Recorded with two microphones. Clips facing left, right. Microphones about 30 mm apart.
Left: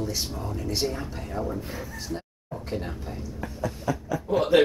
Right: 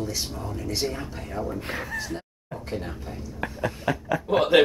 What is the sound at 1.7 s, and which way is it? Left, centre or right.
Speech, right.